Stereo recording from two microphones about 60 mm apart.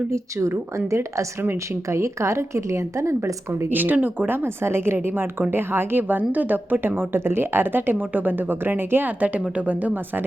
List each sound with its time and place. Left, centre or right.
0.9 s a woman's voice: right
3.7 s a woman's voice: right